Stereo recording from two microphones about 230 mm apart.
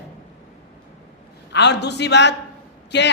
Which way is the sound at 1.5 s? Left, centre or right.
Left.